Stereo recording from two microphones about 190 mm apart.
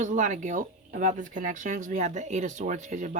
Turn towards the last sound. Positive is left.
turn(degrees=-40)  # may be behind; listen again after turning